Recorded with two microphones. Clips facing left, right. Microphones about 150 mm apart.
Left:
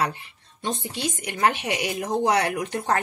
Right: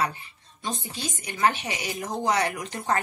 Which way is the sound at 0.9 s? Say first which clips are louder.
Left 5 dB; 70° left (ahead or behind).